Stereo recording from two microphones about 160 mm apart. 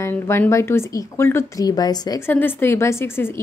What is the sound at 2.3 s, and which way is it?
A woman's voice, 15° left (ahead or behind).